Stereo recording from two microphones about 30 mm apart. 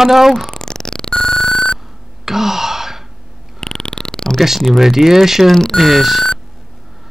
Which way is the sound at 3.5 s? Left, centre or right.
Centre.